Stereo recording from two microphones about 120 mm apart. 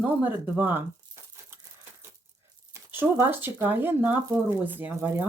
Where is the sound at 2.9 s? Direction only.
15° right (ahead or behind).